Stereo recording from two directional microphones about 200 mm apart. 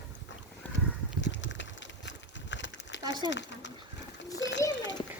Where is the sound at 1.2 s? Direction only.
65° left (ahead or behind).